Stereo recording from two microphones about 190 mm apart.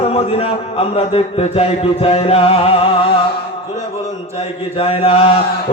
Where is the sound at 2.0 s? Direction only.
30° left (ahead or behind).